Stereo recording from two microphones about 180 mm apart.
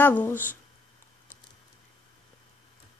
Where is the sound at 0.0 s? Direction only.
10° left (ahead or behind).